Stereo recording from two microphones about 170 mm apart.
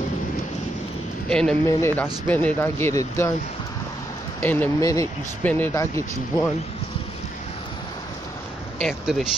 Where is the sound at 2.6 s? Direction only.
15° left (ahead or behind).